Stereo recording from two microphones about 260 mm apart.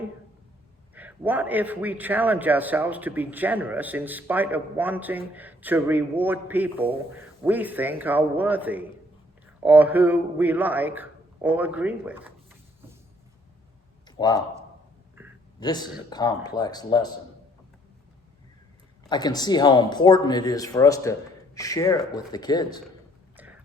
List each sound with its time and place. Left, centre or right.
0.9 s a man's voice: centre
14.2 s speech: centre
15.6 s speech: centre
19.0 s speech: centre